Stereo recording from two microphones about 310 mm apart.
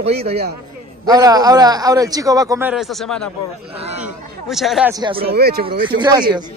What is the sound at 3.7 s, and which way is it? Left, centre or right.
Speech, centre.